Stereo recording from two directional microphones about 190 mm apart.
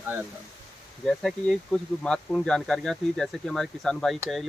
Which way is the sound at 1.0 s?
Centre (ahead or behind).